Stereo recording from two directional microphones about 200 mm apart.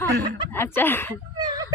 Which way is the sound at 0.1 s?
50° right (ahead or behind).